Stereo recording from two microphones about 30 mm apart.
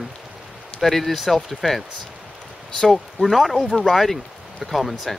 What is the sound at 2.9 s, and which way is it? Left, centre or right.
Speech, centre.